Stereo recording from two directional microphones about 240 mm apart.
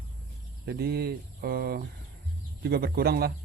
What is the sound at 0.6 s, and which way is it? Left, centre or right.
Speech, right.